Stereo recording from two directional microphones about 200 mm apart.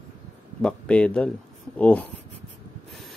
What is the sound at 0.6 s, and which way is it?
Speech, 5° left (ahead or behind).